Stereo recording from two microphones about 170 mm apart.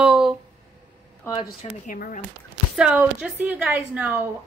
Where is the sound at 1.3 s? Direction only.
30° left (ahead or behind).